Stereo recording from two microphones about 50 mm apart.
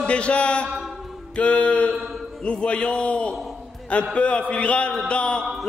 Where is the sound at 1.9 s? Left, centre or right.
Centre.